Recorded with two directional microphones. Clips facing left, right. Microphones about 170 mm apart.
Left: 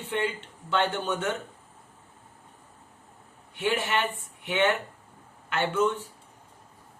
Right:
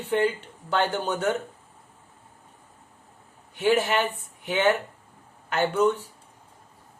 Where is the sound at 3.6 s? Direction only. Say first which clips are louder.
Right 5 dB; 40° right (ahead or behind).